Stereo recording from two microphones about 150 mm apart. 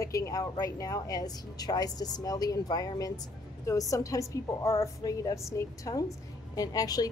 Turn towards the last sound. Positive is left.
turn(degrees=25)  # may be behind; listen again after turning